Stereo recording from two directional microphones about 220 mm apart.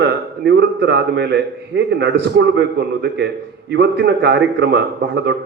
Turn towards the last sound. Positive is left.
turn(degrees=-50)  # may be behind; listen again after turning